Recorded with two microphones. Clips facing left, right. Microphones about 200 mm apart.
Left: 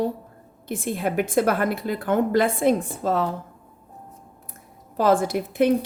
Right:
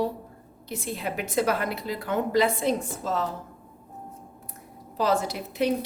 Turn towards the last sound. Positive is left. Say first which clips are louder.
# left 6 dB
turn(degrees=50)  # may be behind; listen again after turning